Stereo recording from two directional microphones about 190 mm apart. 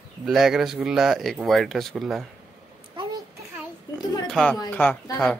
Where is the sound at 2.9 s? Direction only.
25° right (ahead or behind).